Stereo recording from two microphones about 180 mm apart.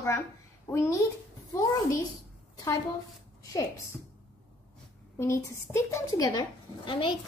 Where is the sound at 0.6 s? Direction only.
15° left (ahead or behind).